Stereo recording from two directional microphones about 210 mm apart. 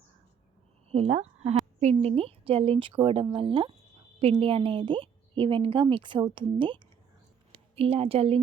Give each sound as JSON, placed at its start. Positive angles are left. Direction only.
{"t": 0.9, "sound": "a woman's voice", "side_deg": -30}